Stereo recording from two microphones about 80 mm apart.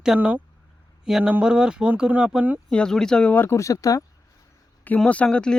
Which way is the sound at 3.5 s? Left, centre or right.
Left.